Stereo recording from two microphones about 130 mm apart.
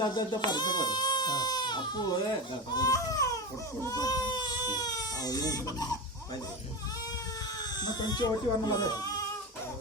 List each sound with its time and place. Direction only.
0.0 s speech: 35° left (ahead or behind)
7.8 s speech: 30° left (ahead or behind)